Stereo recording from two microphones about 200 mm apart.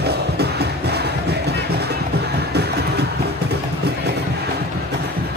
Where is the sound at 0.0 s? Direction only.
55° right (ahead or behind).